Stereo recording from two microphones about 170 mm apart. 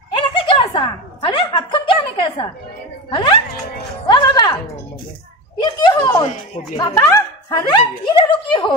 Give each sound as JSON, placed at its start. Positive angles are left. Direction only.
{"t": 0.1, "sound": "a sound", "side_deg": 30}
{"t": 4.1, "sound": "music", "side_deg": 25}
{"t": 5.6, "sound": "speech", "side_deg": 25}